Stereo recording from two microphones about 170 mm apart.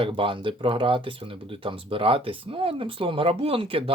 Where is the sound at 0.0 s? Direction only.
30° right (ahead or behind).